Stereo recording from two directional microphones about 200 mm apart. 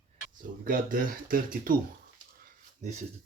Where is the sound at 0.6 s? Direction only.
45° right (ahead or behind).